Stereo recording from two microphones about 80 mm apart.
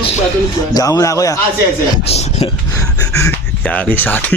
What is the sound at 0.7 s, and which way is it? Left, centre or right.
Speech, left.